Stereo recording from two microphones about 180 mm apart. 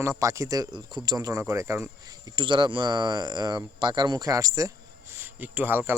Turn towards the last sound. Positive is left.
turn(degrees=-10)  # may be behind; listen again after turning